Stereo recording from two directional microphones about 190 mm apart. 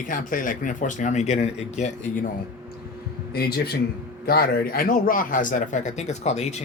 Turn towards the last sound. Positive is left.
turn(degrees=35)  # may be behind; listen again after turning